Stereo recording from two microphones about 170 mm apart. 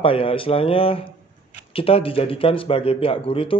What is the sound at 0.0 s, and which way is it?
Speech, 30° left (ahead or behind).